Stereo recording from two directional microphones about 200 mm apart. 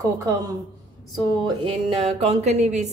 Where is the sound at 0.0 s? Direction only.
15° right (ahead or behind).